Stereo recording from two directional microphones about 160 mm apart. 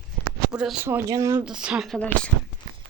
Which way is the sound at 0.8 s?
20° right (ahead or behind).